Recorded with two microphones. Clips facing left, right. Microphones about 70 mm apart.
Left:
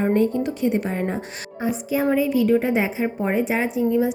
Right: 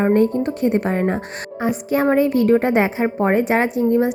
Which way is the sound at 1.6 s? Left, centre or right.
Right.